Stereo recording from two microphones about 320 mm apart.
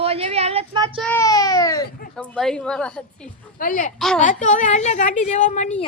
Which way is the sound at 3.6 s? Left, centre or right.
Left.